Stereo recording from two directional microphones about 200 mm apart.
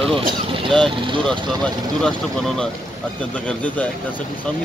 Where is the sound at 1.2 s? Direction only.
5° left (ahead or behind).